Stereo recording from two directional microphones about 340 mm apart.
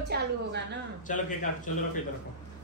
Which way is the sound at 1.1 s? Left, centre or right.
Left.